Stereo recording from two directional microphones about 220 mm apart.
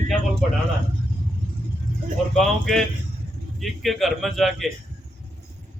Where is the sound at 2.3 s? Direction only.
Centre (ahead or behind).